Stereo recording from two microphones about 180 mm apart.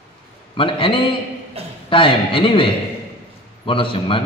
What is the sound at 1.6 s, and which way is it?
Speech, 35° right (ahead or behind).